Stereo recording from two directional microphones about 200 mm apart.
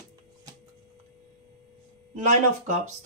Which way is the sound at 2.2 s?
35° right (ahead or behind).